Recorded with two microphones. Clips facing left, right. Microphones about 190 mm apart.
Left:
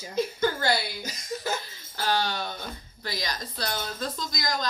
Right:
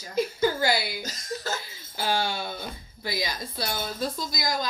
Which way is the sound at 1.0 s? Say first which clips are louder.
Left 1 dB; 15° left (ahead or behind).